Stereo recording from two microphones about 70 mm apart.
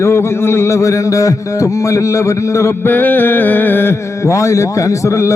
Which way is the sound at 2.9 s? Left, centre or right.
Left.